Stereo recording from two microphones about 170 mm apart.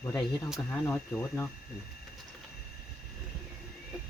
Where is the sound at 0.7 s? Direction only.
10° left (ahead or behind).